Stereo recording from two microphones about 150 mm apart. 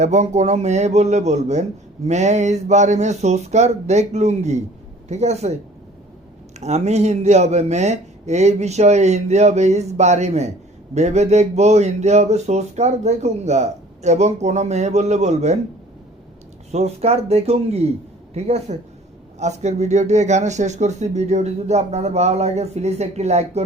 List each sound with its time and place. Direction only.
0.0 s speech: 50° right (ahead or behind)
6.6 s speech: 45° right (ahead or behind)
16.7 s speech: 45° right (ahead or behind)